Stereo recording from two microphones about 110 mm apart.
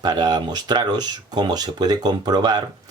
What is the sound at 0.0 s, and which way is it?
Speech, 40° right (ahead or behind).